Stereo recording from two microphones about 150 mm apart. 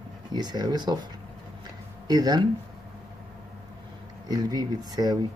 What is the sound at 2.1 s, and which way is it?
Speech, 25° right (ahead or behind).